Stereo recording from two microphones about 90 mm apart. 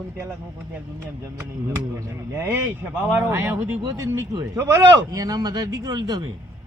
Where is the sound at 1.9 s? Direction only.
30° right (ahead or behind); by 6.2 s 50° right (ahead or behind).